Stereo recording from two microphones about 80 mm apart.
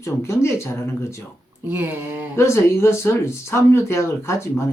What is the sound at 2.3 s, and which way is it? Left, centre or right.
Speech, left.